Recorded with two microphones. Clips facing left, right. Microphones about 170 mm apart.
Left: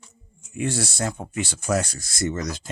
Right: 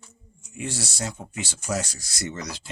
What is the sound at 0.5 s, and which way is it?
Speech, 55° left (ahead or behind).